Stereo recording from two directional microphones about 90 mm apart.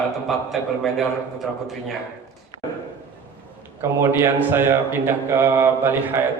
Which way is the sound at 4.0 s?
25° right (ahead or behind).